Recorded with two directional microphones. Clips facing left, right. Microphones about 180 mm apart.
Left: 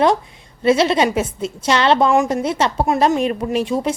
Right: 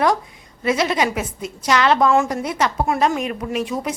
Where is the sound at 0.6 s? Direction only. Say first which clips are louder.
Left 5 dB; 30° left (ahead or behind).